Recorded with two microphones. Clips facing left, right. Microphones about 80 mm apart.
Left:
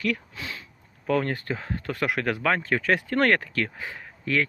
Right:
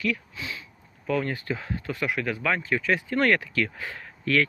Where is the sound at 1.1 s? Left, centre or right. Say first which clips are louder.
Left 2 dB; left.